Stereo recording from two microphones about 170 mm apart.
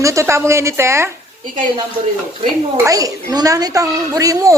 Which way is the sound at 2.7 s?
20° right (ahead or behind).